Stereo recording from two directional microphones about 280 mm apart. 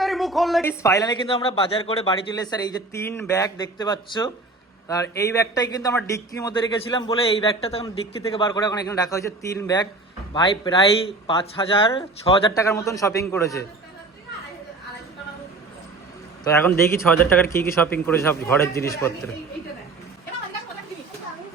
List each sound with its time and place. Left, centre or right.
0.0 s a man's voice: centre
16.4 s a man's voice: centre